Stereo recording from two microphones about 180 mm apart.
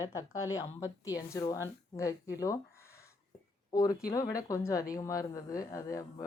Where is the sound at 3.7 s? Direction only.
20° left (ahead or behind).